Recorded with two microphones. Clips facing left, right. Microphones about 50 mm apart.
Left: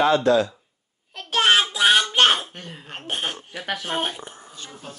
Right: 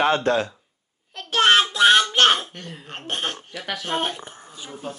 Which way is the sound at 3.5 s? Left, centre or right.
Centre.